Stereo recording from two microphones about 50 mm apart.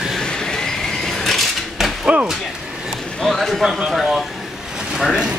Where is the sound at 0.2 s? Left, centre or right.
Centre.